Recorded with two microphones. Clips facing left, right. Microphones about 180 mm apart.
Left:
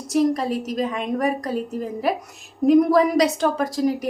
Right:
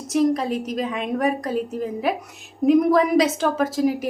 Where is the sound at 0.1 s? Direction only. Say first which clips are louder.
Even; centre (ahead or behind).